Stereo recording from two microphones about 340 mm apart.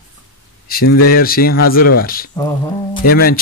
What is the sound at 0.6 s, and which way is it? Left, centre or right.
Speech, left.